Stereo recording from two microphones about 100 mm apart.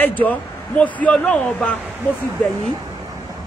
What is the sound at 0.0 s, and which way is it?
Speech, 15° left (ahead or behind).